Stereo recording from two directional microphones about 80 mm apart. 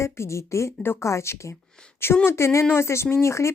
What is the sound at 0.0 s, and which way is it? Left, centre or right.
Speech, left.